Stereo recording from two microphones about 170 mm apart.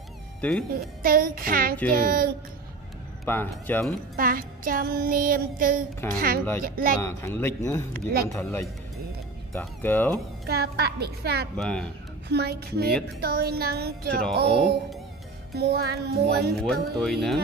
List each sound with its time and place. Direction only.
0.4 s speech: 5° left (ahead or behind)
1.0 s music: 55° right (ahead or behind)
3.3 s speech: 10° left (ahead or behind)
4.2 s music: 55° right (ahead or behind)
7.0 s speech: 15° left (ahead or behind)
10.4 s music: 70° right (ahead or behind)
11.5 s speech: 5° left (ahead or behind)
12.3 s music: 75° right (ahead or behind)
17.0 s speech: centre (ahead or behind)